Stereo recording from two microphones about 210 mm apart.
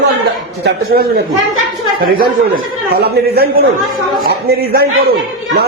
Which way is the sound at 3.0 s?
50° right (ahead or behind).